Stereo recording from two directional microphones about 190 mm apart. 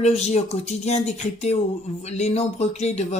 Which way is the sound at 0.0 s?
35° left (ahead or behind).